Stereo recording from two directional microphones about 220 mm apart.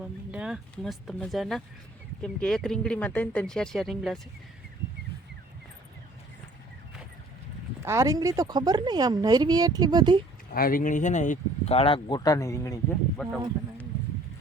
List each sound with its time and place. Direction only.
0.0 s speech: 5° right (ahead or behind)
7.9 s speech: 15° right (ahead or behind)
10.5 s speech: 40° left (ahead or behind); by 12.8 s 15° left (ahead or behind)
13.2 s speech: 5° left (ahead or behind)